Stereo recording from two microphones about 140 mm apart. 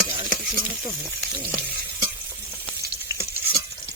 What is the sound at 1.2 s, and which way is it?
Frying, 10° right (ahead or behind).